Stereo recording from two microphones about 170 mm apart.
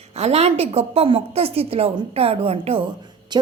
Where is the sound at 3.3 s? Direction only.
25° right (ahead or behind).